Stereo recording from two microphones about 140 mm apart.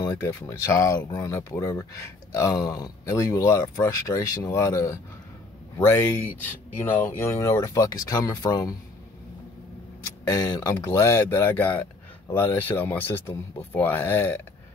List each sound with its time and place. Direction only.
0.1 s speech: 20° left (ahead or behind)
10.2 s speech: 30° left (ahead or behind)